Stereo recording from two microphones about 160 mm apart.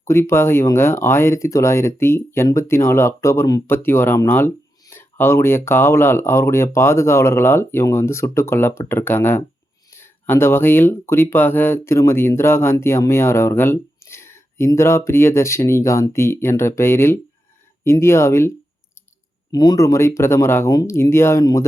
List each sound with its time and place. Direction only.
0.0 s speech: 15° left (ahead or behind)